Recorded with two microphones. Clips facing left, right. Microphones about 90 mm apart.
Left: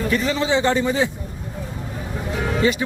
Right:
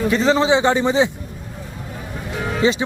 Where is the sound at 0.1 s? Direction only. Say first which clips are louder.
Right 5 dB; 30° right (ahead or behind).